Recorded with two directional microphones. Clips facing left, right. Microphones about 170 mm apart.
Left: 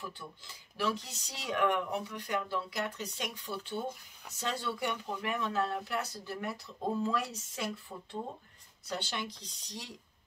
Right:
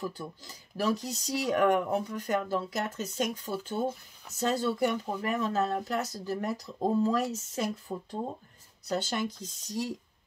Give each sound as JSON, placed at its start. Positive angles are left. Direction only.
{"t": 0.0, "sound": "speech", "side_deg": -40}